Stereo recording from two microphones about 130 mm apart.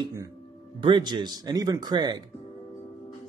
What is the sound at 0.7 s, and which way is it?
Speech, 40° right (ahead or behind).